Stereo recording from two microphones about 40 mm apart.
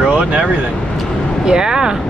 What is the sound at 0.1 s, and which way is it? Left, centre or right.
Vehicle, right.